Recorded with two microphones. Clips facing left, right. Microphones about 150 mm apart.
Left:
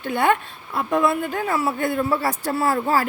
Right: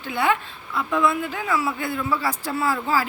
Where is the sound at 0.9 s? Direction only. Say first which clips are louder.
Left 2 dB; 45° left (ahead or behind).